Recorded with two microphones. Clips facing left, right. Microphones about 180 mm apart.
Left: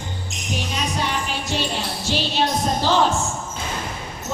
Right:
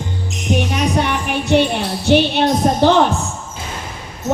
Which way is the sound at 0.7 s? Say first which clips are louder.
Right 7 dB; 60° right (ahead or behind).